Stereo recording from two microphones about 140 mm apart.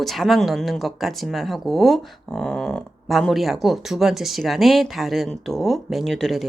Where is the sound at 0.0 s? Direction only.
Centre (ahead or behind).